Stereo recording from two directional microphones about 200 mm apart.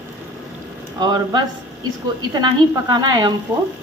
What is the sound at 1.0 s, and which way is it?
A woman's voice, 20° right (ahead or behind).